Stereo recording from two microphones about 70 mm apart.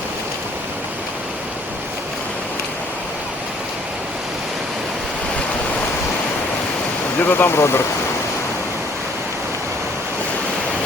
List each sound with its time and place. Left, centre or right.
7.2 s speech: left